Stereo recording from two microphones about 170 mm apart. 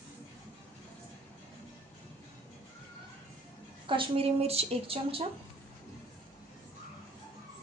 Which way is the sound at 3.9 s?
30° right (ahead or behind).